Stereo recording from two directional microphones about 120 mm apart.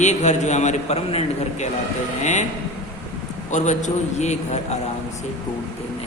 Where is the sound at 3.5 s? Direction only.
85° left; by 4.8 s 70° left (ahead or behind).